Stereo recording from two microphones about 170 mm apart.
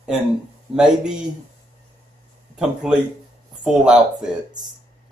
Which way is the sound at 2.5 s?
5° right (ahead or behind).